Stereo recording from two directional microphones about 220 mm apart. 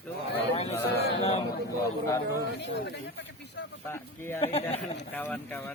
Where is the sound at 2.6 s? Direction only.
55° left (ahead or behind).